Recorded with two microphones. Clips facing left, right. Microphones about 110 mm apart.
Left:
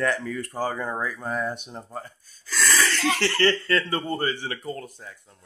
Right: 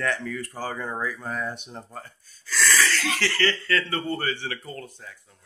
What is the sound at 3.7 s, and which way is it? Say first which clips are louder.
Speech: left 1 dB; 25° left (ahead or behind).